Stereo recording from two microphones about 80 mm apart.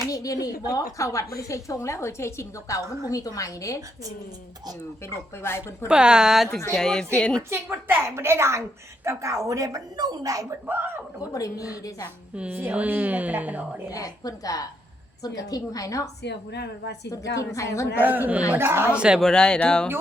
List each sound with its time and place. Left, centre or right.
0.1 s a woman's voice: left
5.4 s a woman's voice: left
5.9 s speech: centre
6.7 s speech: centre
7.5 s a woman's voice: right
10.7 s a woman's voice: right
11.3 s a woman's voice: left
12.4 s a woman's voice: centre
13.9 s a woman's voice: left
17.1 s a woman's voice: left
17.9 s a woman's voice: right
18.9 s speech: centre
19.2 s speech: centre